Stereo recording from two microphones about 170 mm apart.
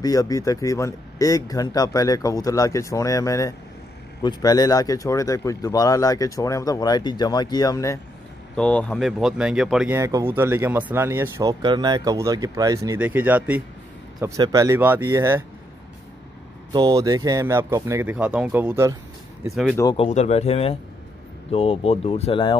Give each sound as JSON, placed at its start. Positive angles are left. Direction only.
{"t": 0.0, "sound": "speech", "side_deg": 20}
{"t": 8.5, "sound": "speech", "side_deg": 5}
{"t": 9.9, "sound": "speech", "side_deg": -15}
{"t": 11.6, "sound": "speech", "side_deg": -25}
{"t": 16.7, "sound": "speech", "side_deg": -25}
{"t": 20.0, "sound": "speech", "side_deg": 40}